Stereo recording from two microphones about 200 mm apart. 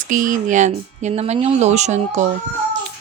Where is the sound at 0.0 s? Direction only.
40° right (ahead or behind).